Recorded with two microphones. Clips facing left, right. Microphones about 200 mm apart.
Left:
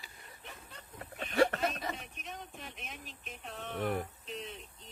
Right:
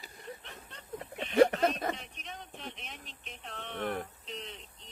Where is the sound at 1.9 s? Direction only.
5° left (ahead or behind).